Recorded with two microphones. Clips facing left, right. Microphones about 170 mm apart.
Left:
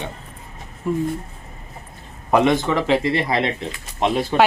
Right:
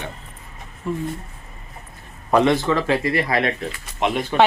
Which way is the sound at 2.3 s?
15° left (ahead or behind).